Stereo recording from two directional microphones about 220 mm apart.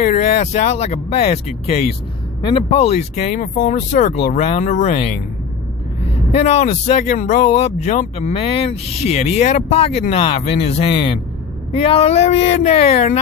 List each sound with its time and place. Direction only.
0.0 s speech: 30° left (ahead or behind)
6.3 s speech: 30° left (ahead or behind)